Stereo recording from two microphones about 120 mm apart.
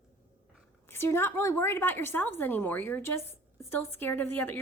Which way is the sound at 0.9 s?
20° left (ahead or behind).